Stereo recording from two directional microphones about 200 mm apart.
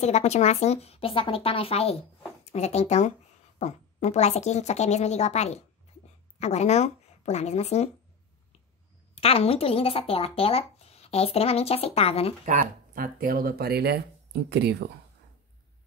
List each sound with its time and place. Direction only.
0.0 s speech: 35° left (ahead or behind)
9.1 s speech: 30° left (ahead or behind)
12.4 s speech: 45° right (ahead or behind)